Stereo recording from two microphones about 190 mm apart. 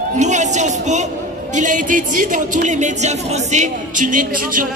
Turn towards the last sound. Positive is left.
turn(degrees=-45)  # may be behind; listen again after turning